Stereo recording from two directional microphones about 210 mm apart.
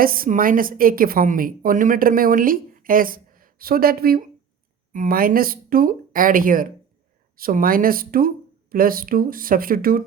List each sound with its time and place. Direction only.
0.0 s a woman's voice: 45° right (ahead or behind)